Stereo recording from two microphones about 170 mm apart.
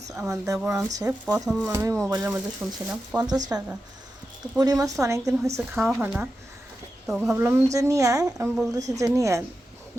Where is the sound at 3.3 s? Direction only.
20° right (ahead or behind).